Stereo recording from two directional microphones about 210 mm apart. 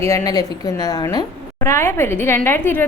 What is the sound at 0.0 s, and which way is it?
A woman's voice, 15° left (ahead or behind).